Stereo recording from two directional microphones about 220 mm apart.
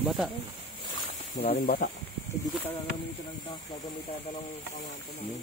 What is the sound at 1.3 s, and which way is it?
Speech, 25° left (ahead or behind).